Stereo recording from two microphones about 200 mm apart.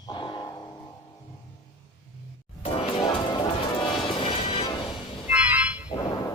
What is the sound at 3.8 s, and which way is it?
Music, 25° left (ahead or behind).